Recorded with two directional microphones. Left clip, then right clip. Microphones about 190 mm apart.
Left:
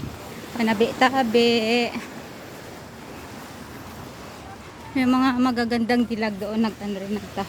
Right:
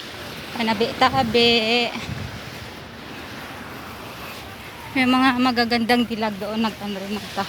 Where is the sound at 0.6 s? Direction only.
35° left (ahead or behind).